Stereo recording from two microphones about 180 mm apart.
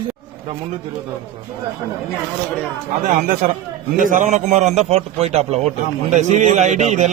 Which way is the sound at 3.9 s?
45° right (ahead or behind).